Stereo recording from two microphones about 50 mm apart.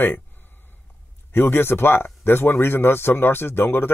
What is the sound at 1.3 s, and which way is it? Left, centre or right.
Speech, left.